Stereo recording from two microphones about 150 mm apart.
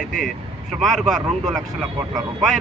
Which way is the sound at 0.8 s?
Centre (ahead or behind).